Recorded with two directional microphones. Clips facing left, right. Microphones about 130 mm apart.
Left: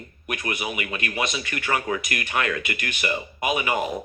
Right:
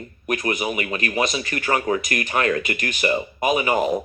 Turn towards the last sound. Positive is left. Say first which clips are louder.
# right 4 dB
turn(degrees=-35)  # may be behind; listen again after turning